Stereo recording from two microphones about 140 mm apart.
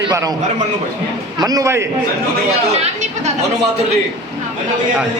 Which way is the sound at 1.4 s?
25° right (ahead or behind).